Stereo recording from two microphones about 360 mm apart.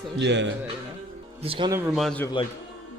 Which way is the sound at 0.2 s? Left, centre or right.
Right.